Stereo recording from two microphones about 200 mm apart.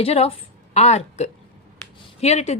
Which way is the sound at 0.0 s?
30° left (ahead or behind).